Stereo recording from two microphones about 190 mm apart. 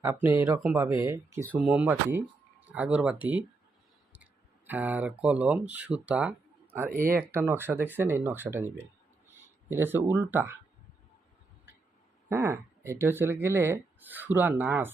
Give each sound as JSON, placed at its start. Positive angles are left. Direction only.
{"t": 0.0, "sound": "speech", "side_deg": -15}
{"t": 6.9, "sound": "speech", "side_deg": -45}
{"t": 7.3, "sound": "speech", "side_deg": -10}
{"t": 12.3, "sound": "speech", "side_deg": -15}